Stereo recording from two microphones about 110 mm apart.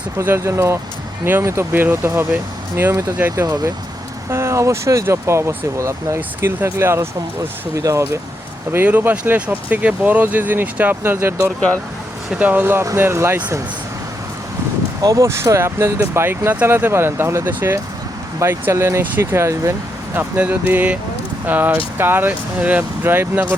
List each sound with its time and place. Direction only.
0.2 s speech: 25° right (ahead or behind)
3.4 s speech: 35° right (ahead or behind)
6.1 s speech: 15° right (ahead or behind)
15.0 s speech: 30° right (ahead or behind)
20.1 s speech: 15° right (ahead or behind)